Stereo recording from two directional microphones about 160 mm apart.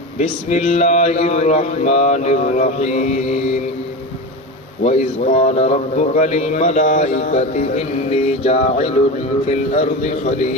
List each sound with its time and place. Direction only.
0.5 s speech: 45° left (ahead or behind)
4.8 s speech: 45° left (ahead or behind)